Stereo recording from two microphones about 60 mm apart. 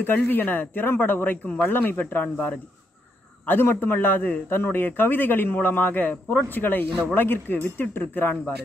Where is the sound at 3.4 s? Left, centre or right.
Left.